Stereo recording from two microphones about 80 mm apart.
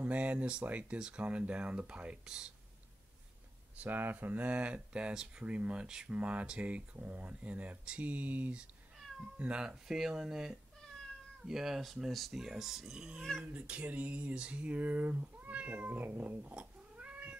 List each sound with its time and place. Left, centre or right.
0.0 s speech: centre
3.8 s speech: right
13.4 s a sound: centre